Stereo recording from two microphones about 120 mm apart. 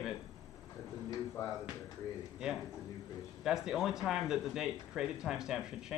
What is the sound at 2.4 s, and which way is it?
Speech, 5° right (ahead or behind).